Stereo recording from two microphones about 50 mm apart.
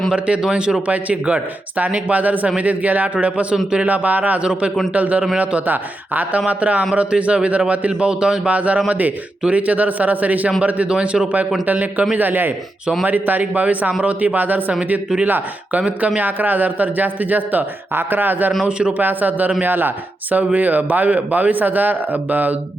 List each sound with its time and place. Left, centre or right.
0.5 s a man's voice: centre
0.9 s a man's voice: right
11.6 s a man's voice: right
16.0 s a man's voice: right
18.6 s speech: right
18.9 s a man's voice: right
20.3 s a man's voice: right